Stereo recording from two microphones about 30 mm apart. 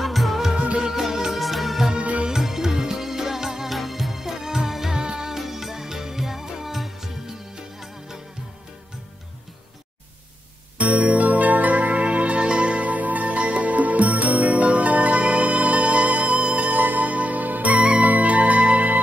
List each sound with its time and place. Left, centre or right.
0.0 s music: centre
0.9 s music: centre
2.0 s music: right
2.7 s music: centre
4.9 s music: centre
10.8 s music: right
12.9 s music: right
16.8 s music: right